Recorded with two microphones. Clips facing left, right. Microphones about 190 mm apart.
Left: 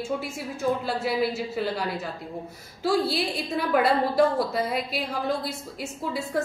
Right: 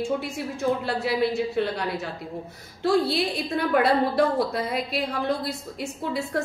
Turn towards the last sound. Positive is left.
turn(degrees=0)  # may be behind; listen again after turning